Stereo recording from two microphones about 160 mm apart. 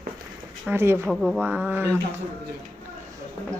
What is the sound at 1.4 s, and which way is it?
Speech, 10° right (ahead or behind).